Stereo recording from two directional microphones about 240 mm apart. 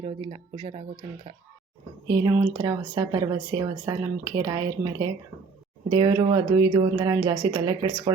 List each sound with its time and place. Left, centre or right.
0.0 s speech: right
2.0 s a woman's voice: centre